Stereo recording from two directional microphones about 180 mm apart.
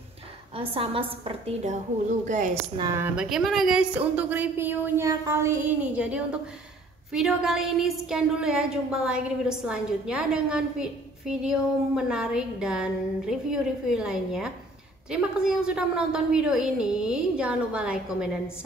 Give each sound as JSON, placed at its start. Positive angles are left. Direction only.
{"t": 0.6, "sound": "a woman's voice", "side_deg": -30}
{"t": 2.2, "sound": "a woman's voice", "side_deg": -45}
{"t": 2.8, "sound": "a woman's voice", "side_deg": -15}
{"t": 3.2, "sound": "a woman's voice", "side_deg": 0}